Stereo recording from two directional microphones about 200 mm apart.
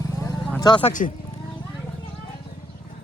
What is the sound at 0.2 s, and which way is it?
Vehicle, 15° left (ahead or behind).